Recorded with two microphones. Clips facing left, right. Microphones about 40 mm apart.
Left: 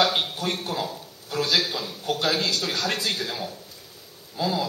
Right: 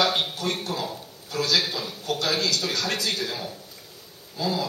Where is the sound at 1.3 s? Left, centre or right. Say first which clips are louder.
Left 1 dB; centre.